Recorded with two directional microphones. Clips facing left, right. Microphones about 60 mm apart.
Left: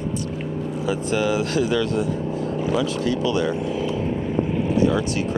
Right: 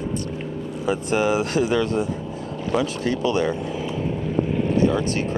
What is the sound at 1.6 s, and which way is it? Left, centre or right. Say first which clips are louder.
Speech: even; right.